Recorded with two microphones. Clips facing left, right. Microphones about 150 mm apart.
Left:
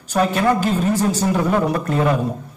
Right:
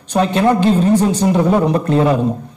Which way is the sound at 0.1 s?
30° right (ahead or behind).